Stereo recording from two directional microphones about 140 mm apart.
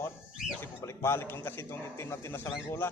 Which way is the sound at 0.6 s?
20° left (ahead or behind).